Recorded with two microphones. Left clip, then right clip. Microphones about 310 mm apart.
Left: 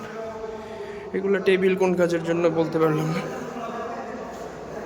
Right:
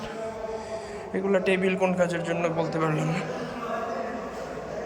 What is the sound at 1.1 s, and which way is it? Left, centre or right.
A man's voice, centre.